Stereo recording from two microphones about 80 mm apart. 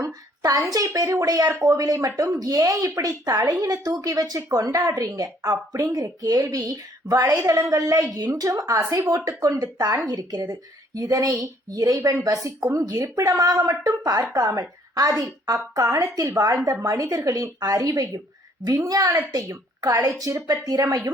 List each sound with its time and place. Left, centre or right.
0.0 s a woman's voice: right